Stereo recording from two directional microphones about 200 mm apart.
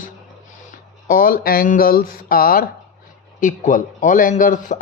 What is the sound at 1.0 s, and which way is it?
Speech, 45° left (ahead or behind).